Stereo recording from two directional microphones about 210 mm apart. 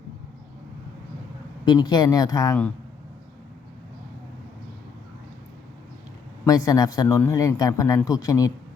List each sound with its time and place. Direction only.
1.6 s speech: 20° left (ahead or behind)
6.4 s speech: 15° left (ahead or behind)